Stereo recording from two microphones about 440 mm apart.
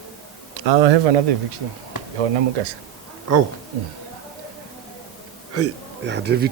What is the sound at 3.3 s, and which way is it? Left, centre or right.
Speech, right.